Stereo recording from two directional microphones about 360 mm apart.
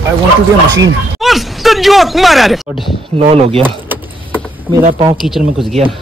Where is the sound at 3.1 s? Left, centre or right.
Centre.